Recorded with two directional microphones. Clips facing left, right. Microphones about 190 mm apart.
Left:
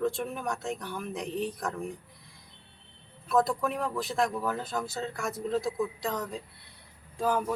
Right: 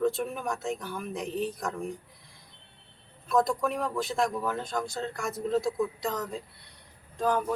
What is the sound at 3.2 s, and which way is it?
A woman's voice, centre (ahead or behind).